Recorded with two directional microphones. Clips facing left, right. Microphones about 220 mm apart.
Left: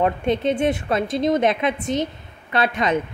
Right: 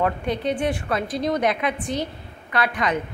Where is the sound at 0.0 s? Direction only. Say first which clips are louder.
Left 3 dB; 25° left (ahead or behind).